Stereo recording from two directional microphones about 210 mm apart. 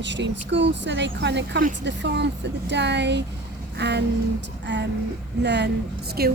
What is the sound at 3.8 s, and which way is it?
Vehicle, 55° right (ahead or behind).